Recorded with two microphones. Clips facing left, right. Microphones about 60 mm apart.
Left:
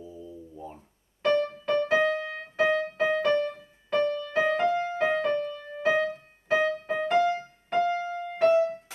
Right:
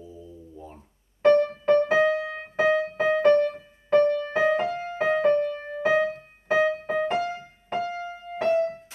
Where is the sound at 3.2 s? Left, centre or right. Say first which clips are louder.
Right 10 dB; right.